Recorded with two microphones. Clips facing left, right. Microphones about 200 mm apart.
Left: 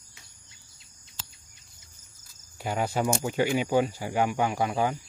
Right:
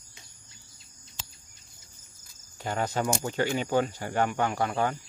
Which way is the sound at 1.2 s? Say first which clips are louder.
Right 1 dB; 15° right (ahead or behind).